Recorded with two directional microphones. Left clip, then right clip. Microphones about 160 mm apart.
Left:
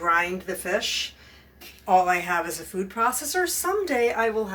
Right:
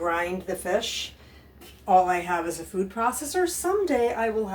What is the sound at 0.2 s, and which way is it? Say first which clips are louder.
Speech: left 2 dB; 30° left (ahead or behind).